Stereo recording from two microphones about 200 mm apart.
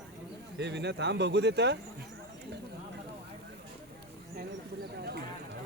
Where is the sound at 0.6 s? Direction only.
60° right (ahead or behind).